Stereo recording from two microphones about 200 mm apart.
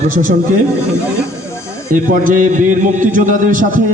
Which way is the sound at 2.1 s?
40° right (ahead or behind).